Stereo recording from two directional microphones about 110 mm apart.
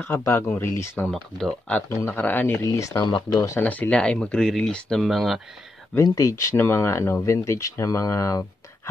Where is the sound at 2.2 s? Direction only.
15° left (ahead or behind).